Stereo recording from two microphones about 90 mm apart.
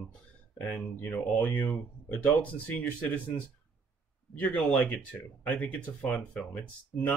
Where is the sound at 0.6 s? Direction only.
15° left (ahead or behind).